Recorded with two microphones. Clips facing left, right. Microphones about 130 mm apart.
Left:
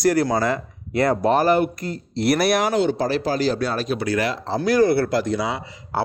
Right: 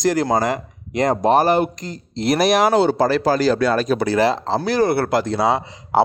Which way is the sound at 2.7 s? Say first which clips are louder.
Right 4 dB; 40° right (ahead or behind).